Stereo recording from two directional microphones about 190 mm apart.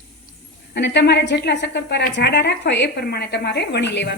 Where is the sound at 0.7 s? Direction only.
65° left (ahead or behind).